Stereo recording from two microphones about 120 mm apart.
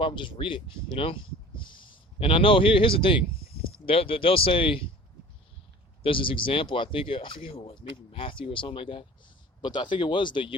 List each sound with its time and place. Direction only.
0.0 s a man's voice: 45° left (ahead or behind)
6.0 s speech: 45° left (ahead or behind)